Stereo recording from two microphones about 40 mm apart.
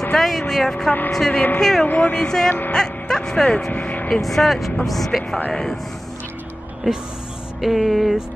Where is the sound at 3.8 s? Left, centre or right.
Left.